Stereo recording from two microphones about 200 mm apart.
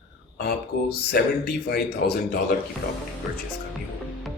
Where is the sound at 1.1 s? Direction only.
50° left (ahead or behind).